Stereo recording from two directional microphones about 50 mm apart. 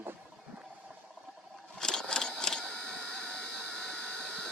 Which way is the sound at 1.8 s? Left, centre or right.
Centre.